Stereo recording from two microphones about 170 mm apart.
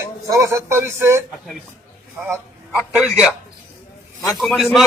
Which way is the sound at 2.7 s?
5° right (ahead or behind).